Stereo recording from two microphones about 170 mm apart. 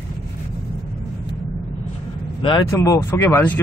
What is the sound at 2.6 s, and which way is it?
Speech, 15° left (ahead or behind).